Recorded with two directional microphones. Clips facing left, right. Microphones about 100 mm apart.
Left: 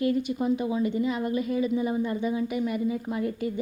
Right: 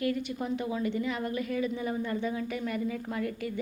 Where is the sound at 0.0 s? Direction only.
20° left (ahead or behind).